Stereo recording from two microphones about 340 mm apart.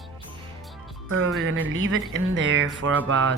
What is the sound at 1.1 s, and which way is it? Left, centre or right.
Speech, right.